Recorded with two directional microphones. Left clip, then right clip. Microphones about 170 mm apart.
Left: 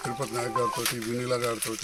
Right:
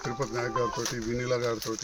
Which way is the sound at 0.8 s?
45° right (ahead or behind).